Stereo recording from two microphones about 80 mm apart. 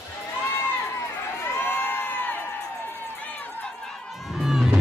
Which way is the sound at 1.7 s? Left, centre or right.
Left.